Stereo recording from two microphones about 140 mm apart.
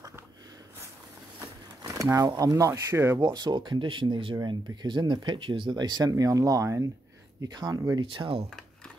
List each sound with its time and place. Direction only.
1.4 s speech: 25° right (ahead or behind)
3.2 s speech: 30° right (ahead or behind)